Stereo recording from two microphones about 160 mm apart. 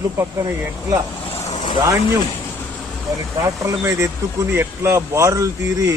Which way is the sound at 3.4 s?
20° right (ahead or behind).